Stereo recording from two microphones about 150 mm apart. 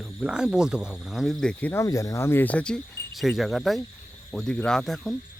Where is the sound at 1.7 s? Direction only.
20° left (ahead or behind).